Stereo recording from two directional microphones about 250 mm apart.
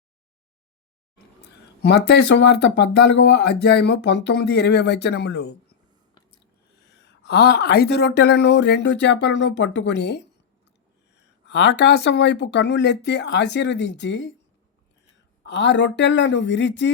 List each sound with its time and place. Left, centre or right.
1.8 s speech: left
6.8 s speech: left
15.4 s speech: left